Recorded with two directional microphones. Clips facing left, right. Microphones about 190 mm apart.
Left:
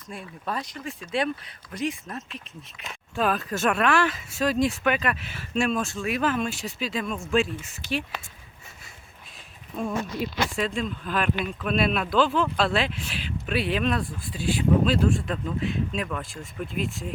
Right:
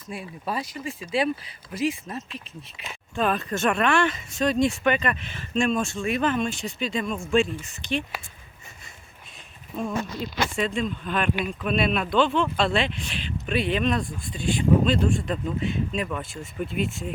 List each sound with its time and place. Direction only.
0.1 s speech: 5° right (ahead or behind)
9.7 s speech: centre (ahead or behind)